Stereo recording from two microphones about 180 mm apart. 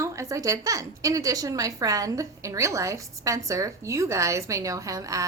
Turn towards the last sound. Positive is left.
turn(degrees=-20)  # may be behind; listen again after turning